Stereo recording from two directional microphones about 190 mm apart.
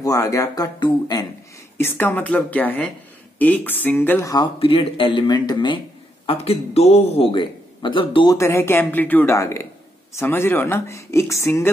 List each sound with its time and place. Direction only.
0.0 s speech: 15° left (ahead or behind)
1.8 s speech: 10° left (ahead or behind)
4.6 s a man's voice: 30° left (ahead or behind)
8.4 s speech: 15° left (ahead or behind)